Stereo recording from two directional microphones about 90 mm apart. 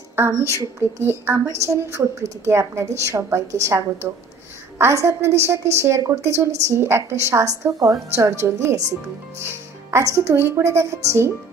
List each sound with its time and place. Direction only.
0.6 s a woman's voice: 30° right (ahead or behind)